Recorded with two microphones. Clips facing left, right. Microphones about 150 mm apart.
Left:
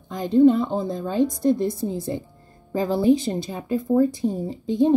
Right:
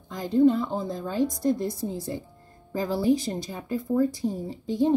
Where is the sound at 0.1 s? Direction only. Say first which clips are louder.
Left 4 dB; 20° left (ahead or behind).